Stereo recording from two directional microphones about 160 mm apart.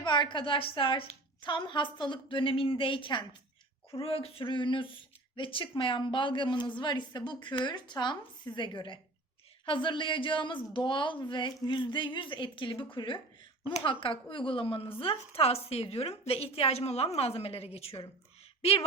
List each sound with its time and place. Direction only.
0.0 s a woman's voice: 30° left (ahead or behind)